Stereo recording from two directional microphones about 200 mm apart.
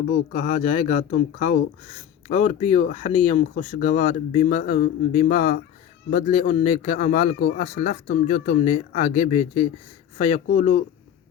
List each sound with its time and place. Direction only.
0.3 s speech: 40° left (ahead or behind)